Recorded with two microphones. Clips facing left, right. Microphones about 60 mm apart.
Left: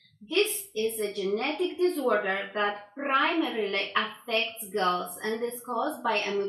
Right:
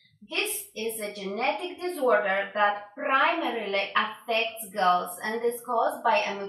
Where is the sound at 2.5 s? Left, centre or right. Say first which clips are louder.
Right 4 dB; centre.